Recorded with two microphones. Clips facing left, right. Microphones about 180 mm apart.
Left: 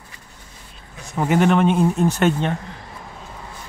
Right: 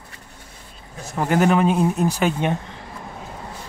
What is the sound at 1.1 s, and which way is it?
Speech, centre (ahead or behind).